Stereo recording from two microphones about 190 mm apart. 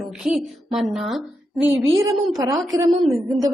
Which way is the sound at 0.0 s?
Centre (ahead or behind).